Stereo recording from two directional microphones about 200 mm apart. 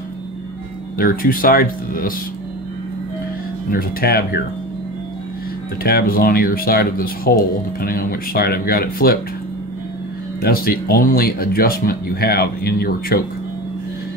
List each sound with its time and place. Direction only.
0.9 s speech: 45° left (ahead or behind)
3.7 s speech: 50° left (ahead or behind)
5.9 s speech: 50° left (ahead or behind)
10.4 s speech: 50° left (ahead or behind)